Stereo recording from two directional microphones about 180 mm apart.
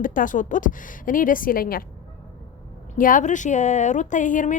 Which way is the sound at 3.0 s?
50° left (ahead or behind).